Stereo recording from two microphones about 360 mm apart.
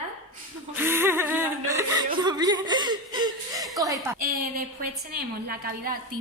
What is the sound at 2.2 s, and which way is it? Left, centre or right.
Chuckle, centre.